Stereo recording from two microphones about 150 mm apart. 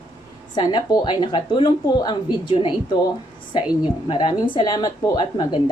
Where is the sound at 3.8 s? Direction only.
35° left (ahead or behind).